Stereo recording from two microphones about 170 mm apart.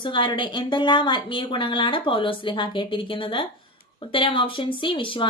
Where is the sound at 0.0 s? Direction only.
30° left (ahead or behind).